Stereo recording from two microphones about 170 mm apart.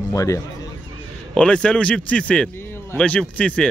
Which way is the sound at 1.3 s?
5° left (ahead or behind).